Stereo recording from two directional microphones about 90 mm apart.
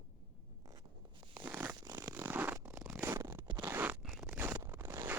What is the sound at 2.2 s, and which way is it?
Zipper, 20° right (ahead or behind).